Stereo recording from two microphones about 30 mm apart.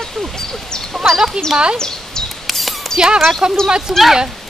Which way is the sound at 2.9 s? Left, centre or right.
Right.